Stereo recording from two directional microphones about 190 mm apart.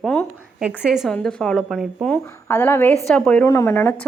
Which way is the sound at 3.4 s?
20° left (ahead or behind).